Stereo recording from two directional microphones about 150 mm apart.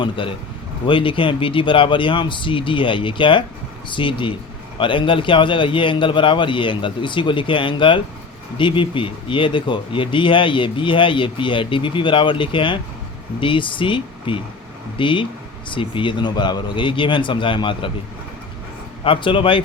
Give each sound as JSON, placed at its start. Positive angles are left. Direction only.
{"t": 0.0, "sound": "speech", "side_deg": 35}
{"t": 19.0, "sound": "speech", "side_deg": 35}